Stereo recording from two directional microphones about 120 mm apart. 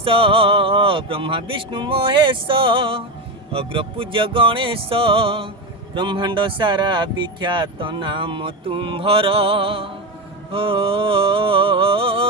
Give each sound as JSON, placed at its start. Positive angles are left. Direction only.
{"t": 0.0, "sound": "speech", "side_deg": -50}